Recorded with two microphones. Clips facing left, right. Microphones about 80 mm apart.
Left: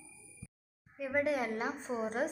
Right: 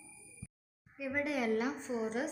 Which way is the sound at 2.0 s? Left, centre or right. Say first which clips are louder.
Left 3 dB; left.